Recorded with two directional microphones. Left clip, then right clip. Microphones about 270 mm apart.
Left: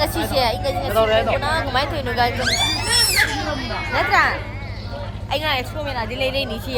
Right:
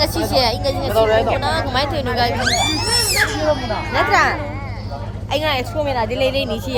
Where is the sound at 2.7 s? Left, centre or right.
Centre.